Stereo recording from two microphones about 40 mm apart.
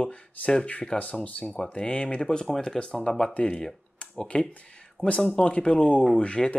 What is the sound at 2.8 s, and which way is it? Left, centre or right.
Speech, centre.